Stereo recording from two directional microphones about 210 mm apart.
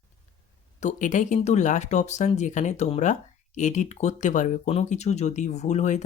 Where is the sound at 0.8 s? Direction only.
35° left (ahead or behind).